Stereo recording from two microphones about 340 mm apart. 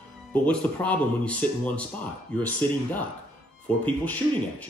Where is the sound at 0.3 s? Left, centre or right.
Centre.